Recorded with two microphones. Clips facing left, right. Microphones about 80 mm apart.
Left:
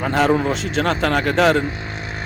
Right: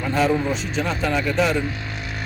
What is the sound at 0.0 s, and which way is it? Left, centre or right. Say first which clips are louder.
Speech: left 3 dB; left.